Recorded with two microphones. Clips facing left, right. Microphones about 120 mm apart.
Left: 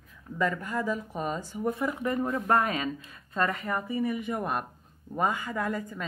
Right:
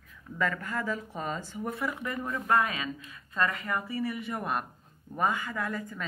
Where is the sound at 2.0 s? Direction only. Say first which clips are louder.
Left 6 dB; 30° left (ahead or behind).